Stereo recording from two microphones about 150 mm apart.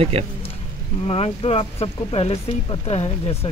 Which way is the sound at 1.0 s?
40° left (ahead or behind).